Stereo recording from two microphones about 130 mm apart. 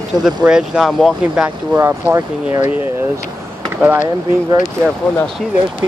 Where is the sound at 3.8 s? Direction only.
15° right (ahead or behind).